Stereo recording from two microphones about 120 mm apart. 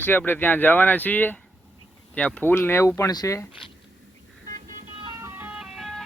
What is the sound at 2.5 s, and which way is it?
Speech, 20° left (ahead or behind).